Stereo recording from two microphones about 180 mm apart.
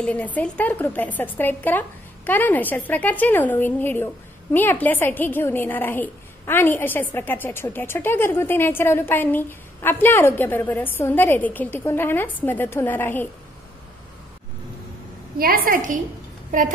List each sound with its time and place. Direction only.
0.0 s speech: 10° left (ahead or behind)
15.3 s a woman's voice: 55° right (ahead or behind)